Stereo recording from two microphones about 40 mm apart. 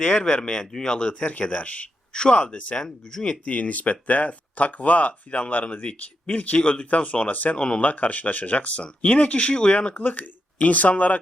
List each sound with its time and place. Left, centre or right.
0.0 s speech: left
2.1 s speech: left
2.7 s speech: centre
3.4 s speech: left
6.6 s speech: left
7.8 s speech: left
9.9 s speech: left